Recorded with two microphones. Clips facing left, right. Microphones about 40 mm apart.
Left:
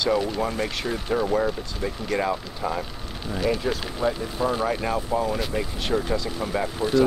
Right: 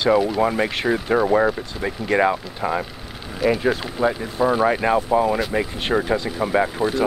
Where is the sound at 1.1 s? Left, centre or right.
Right.